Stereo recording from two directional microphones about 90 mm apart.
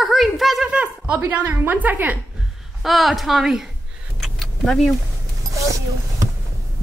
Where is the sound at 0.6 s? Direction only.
15° right (ahead or behind).